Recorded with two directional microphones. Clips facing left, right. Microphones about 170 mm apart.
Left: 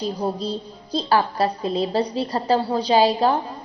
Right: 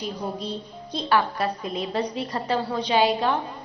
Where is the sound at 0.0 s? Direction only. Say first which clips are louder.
Left 5 dB; 35° left (ahead or behind).